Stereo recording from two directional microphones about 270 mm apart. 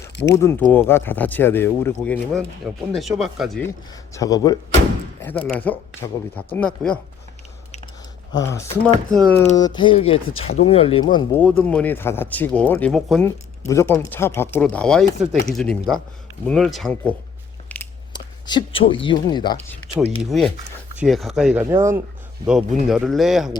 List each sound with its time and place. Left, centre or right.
0.0 s a sound: left
0.3 s speech: centre
4.1 s speech: centre
8.3 s speech: centre
11.4 s speech: centre
17.7 s a sound: centre
21.0 s speech: centre